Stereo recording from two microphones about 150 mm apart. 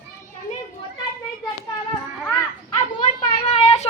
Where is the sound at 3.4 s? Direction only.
50° left (ahead or behind).